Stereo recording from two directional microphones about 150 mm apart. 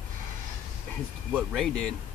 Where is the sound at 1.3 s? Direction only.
Centre (ahead or behind).